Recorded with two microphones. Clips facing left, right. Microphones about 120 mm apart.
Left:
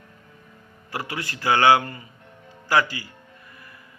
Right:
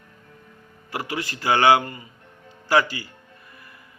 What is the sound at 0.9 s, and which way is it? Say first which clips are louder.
Speech: right 2 dB; 20° right (ahead or behind).